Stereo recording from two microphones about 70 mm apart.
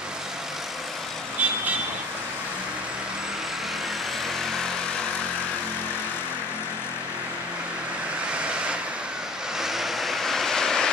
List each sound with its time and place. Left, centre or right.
1.4 s vehicle: right
9.6 s vehicle: centre